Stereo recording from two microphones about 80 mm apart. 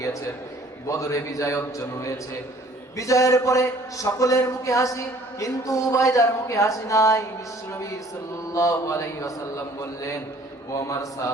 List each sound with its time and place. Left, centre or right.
0.9 s a man's voice: left
8.5 s a man's voice: left